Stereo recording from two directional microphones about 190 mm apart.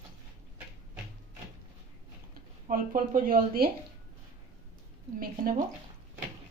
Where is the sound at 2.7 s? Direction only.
45° right (ahead or behind).